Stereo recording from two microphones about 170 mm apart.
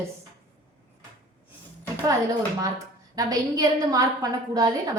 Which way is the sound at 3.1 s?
20° right (ahead or behind).